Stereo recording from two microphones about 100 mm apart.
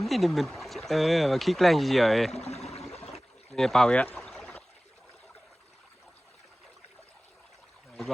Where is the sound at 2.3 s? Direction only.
90° left.